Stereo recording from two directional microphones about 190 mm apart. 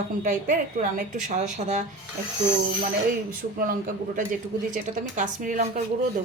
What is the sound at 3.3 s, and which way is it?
Speech, 50° right (ahead or behind).